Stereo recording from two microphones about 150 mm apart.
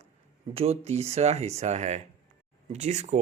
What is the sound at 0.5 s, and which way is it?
Speech, 45° right (ahead or behind).